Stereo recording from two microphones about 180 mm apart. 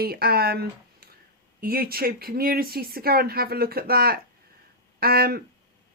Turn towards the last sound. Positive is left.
turn(degrees=-55)  # may be behind; listen again after turning